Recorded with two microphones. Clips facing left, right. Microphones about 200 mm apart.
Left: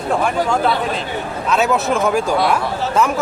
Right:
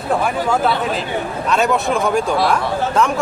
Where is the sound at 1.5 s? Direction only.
Centre (ahead or behind).